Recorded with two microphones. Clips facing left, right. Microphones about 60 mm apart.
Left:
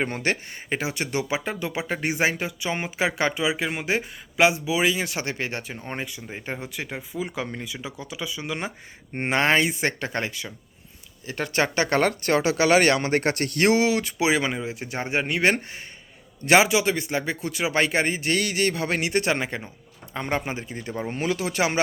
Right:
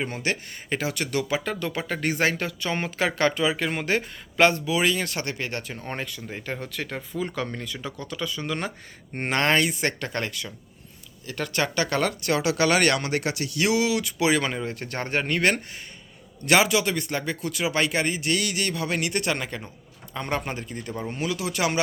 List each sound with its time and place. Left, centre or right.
0.0 s speech: left
0.7 s speech: left
5.7 s speech: centre; by 14.3 s left
14.3 s speech: centre
15.4 s speech: left
21.2 s speech: left